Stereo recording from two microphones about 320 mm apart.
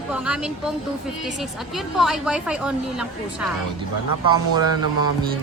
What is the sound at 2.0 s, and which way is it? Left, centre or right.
Speech, centre.